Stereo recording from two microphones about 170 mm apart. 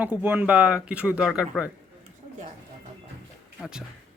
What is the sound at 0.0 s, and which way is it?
Speech, 10° right (ahead or behind).